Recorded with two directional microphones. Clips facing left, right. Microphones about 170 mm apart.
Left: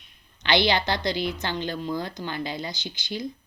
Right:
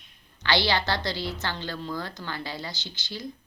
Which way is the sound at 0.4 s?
20° left (ahead or behind).